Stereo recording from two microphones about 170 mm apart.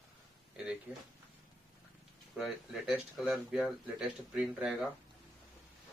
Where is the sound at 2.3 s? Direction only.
Centre (ahead or behind).